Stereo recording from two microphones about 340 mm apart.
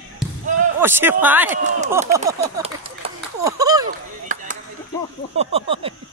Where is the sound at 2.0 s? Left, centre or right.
Centre.